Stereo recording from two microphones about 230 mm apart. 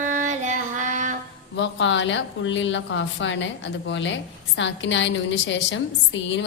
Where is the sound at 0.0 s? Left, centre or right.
Right.